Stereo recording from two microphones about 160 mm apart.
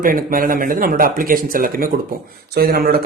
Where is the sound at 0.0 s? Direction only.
60° right (ahead or behind).